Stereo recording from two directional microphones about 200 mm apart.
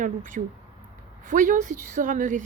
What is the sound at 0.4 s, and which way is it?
Speech, 40° right (ahead or behind).